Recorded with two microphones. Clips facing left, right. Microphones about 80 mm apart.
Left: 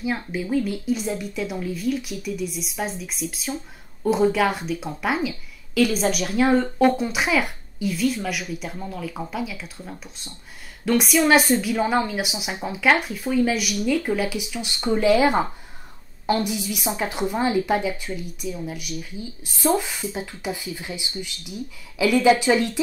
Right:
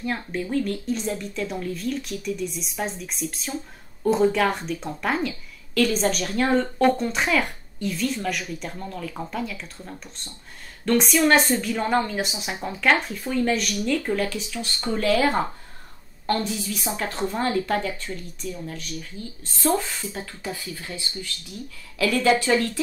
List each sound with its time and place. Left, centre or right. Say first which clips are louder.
0.0 s a woman's voice: left 1 dB; centre